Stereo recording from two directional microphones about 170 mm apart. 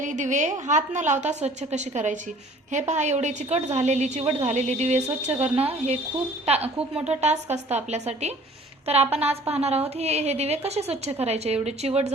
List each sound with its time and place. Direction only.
0.0 s a woman's voice: 45° right (ahead or behind)
6.7 s a woman's voice: 5° right (ahead or behind)
7.5 s a woman's voice: 40° right (ahead or behind)